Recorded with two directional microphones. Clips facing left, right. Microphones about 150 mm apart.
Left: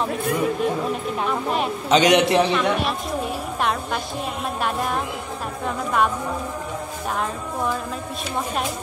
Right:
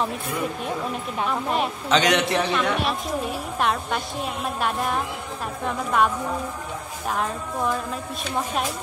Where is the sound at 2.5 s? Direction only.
Centre (ahead or behind).